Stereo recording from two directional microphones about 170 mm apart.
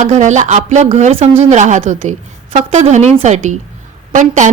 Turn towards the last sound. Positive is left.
turn(degrees=-45)  # may be behind; listen again after turning